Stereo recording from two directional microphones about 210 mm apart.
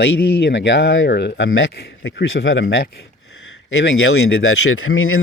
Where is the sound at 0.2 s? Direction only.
50° left (ahead or behind).